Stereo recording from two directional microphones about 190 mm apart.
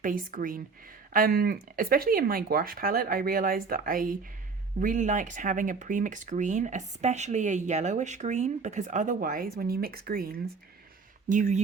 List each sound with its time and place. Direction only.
0.0 s speech: 45° right (ahead or behind)
11.3 s speech: 40° right (ahead or behind)